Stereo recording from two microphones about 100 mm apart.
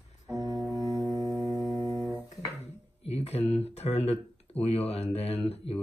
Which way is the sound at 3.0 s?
90° left.